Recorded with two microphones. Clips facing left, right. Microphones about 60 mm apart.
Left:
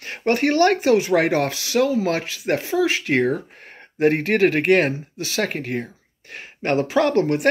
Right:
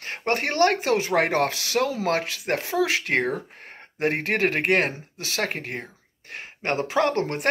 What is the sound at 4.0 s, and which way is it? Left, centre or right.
Speech, right.